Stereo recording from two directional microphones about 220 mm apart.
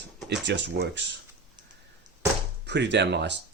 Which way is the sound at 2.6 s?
50° right (ahead or behind).